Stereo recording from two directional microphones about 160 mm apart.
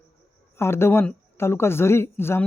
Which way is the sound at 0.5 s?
15° left (ahead or behind).